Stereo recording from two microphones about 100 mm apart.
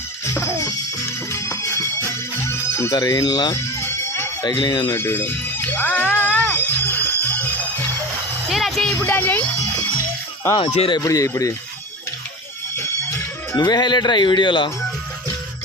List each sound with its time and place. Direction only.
0.3 s music: 30° left (ahead or behind)
3.0 s speech: 40° left (ahead or behind)
3.5 s music: 25° left (ahead or behind)
4.4 s speech: 45° left (ahead or behind)
4.9 s speech: 25° left (ahead or behind)
6.3 s music: 20° left (ahead or behind)
8.4 s music: centre (ahead or behind)
9.0 s speech: 20° left (ahead or behind)
11.0 s speech: 35° left (ahead or behind)
12.7 s music: 25° left (ahead or behind)
13.7 s speech: 45° left (ahead or behind)